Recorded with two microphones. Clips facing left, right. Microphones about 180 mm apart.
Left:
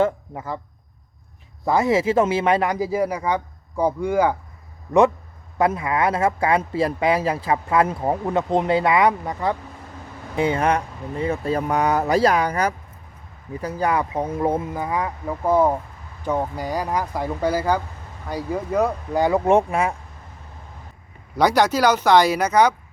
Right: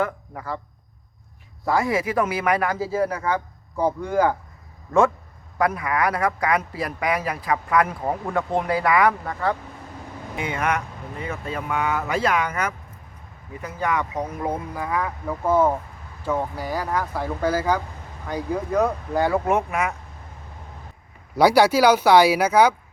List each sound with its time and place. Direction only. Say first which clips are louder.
0.0 s speech: left 5 dB; 20° left (ahead or behind)
1.6 s speech: left 4 dB; 20° left (ahead or behind)
5.5 s a man's voice: left 2 dB; 25° left (ahead or behind)
10.3 s a man's voice: left 5 dB; 30° left (ahead or behind); by 19.4 s 15° left (ahead or behind)
19.5 s a man's voice: left 5 dB; 30° left (ahead or behind)
21.3 s speech: right 2 dB; 10° right (ahead or behind)